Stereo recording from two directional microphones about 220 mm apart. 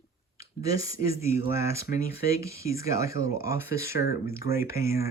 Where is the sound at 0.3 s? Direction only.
15° right (ahead or behind).